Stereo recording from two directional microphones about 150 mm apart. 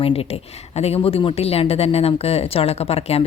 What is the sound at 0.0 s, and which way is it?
Speech, 40° left (ahead or behind).